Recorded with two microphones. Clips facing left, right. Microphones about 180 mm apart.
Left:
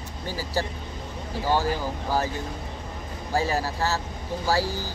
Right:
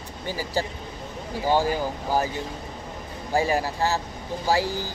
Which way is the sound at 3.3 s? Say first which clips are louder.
Right 2 dB; 15° right (ahead or behind).